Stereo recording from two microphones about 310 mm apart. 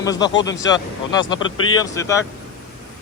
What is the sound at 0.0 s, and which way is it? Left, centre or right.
Speech, centre.